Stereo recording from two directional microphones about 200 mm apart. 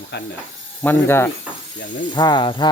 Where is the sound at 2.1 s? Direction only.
20° left (ahead or behind).